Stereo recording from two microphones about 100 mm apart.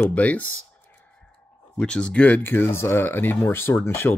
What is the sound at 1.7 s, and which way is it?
Speech, 10° left (ahead or behind).